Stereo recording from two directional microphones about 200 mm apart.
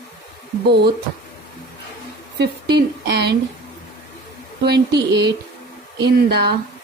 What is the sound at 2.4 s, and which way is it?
Speech, 55° right (ahead or behind).